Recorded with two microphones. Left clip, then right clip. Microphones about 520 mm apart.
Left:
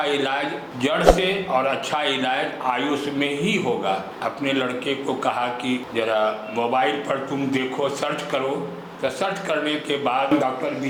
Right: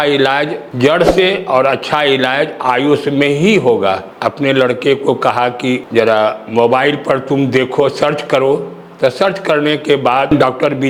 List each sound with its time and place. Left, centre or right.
0.0 s a man's voice: right